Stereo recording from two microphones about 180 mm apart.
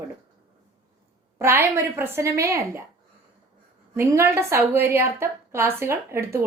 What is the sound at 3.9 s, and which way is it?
A woman's voice, 15° right (ahead or behind).